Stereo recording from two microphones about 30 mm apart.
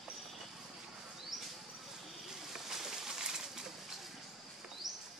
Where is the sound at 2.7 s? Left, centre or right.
Centre.